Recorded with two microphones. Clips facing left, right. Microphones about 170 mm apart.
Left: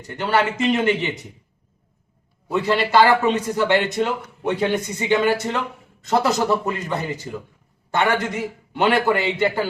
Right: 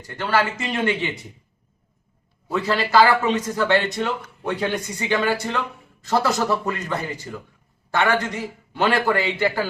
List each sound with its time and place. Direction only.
0.0 s a man's voice: 20° left (ahead or behind)
2.5 s a man's voice: 20° left (ahead or behind)